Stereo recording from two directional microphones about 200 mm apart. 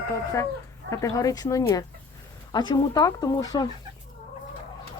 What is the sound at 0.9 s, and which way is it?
Speech, 15° left (ahead or behind).